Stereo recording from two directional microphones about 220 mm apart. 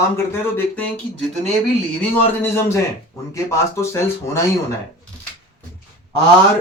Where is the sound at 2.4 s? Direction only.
10° left (ahead or behind).